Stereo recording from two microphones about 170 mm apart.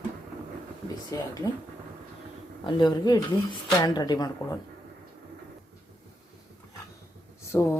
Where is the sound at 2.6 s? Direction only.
25° left (ahead or behind).